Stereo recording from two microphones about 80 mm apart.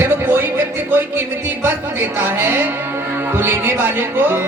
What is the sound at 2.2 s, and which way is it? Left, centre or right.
A woman's voice, right.